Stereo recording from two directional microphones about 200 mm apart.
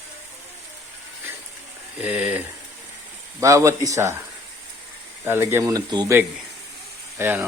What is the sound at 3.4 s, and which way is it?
Speech, 15° right (ahead or behind).